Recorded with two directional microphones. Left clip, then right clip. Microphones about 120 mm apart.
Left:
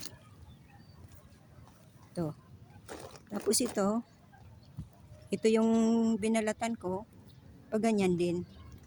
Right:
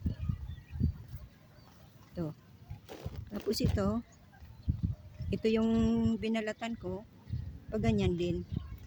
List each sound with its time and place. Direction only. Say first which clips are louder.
2.2 s speech: left 3 dB; 25° right (ahead or behind)
2.8 s a sound: left 2 dB; 20° right (ahead or behind)
5.3 s speech: left 3 dB; 25° right (ahead or behind)